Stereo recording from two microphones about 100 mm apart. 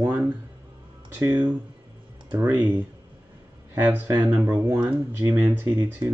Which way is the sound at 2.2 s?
15° right (ahead or behind).